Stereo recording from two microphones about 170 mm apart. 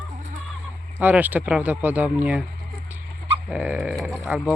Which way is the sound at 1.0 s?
10° right (ahead or behind).